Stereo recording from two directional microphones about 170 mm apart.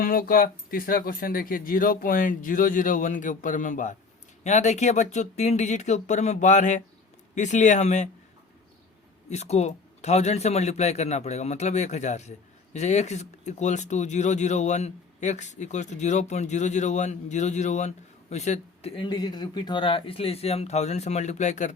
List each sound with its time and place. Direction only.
0.0 s speech: 55° left (ahead or behind)
9.3 s speech: 40° left (ahead or behind)